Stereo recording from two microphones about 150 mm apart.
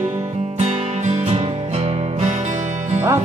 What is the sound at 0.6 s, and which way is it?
Music, 40° right (ahead or behind).